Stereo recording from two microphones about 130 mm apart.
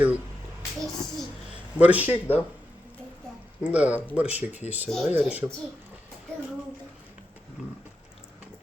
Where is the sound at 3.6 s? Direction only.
10° right (ahead or behind).